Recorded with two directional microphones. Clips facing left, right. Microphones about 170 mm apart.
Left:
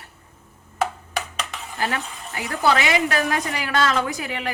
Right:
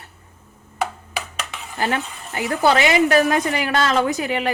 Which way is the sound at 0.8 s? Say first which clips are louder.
Left 1 dB; centre (ahead or behind).